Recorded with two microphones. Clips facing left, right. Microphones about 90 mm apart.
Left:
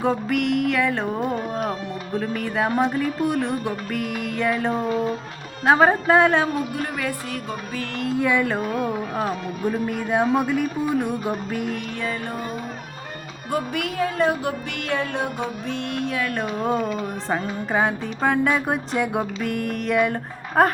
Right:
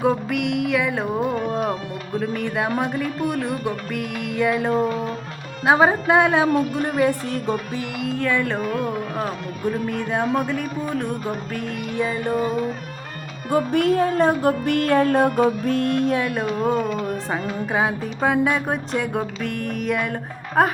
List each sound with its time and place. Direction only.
0.0 s music: centre (ahead or behind)
6.9 s music: 30° right (ahead or behind)
8.1 s music: 10° left (ahead or behind)
11.9 s music: 15° right (ahead or behind)
13.5 s music: 35° right (ahead or behind)
16.3 s music: 5° right (ahead or behind)